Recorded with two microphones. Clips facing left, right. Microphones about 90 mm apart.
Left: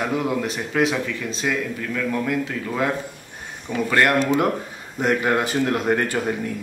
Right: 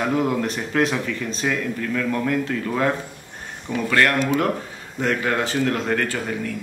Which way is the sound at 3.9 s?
20° left (ahead or behind).